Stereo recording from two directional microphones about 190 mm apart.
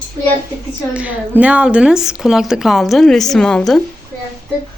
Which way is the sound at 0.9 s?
10° right (ahead or behind).